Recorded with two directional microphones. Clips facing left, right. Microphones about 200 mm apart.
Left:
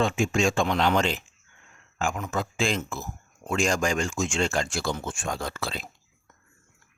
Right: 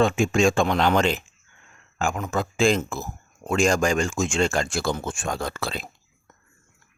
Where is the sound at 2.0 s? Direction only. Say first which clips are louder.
Right 3 dB; 45° right (ahead or behind).